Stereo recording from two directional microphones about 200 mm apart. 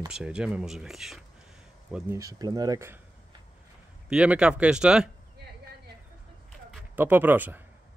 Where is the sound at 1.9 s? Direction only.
15° right (ahead or behind).